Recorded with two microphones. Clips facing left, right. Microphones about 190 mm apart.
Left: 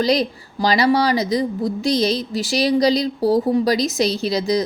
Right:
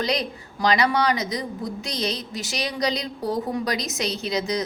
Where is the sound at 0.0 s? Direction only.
30° left (ahead or behind).